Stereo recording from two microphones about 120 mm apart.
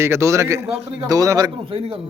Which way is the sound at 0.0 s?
25° right (ahead or behind).